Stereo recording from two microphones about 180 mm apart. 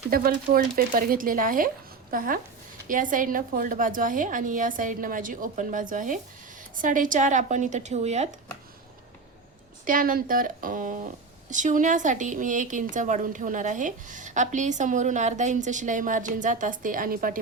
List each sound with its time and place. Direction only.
0.1 s speech: 55° right (ahead or behind); by 8.3 s 40° right (ahead or behind)
9.8 s speech: 50° right (ahead or behind)